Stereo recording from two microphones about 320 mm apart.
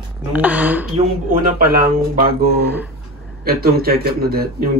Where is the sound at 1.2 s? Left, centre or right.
Right.